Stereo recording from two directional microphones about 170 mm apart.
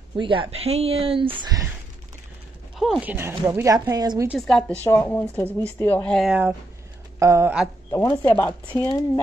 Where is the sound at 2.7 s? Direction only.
Centre (ahead or behind).